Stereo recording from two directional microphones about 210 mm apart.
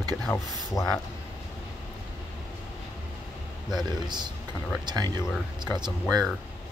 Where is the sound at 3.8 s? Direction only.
20° right (ahead or behind).